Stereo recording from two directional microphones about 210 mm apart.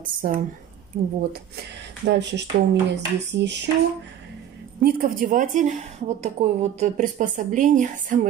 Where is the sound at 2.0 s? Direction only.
55° right (ahead or behind).